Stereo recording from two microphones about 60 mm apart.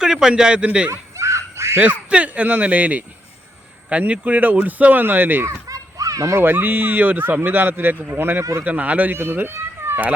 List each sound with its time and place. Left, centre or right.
0.0 s a man's voice: centre
0.9 s a sound: right
1.8 s speech: right
5.5 s children playing: right
6.3 s speech: right
8.6 s speech: right
9.1 s speech: right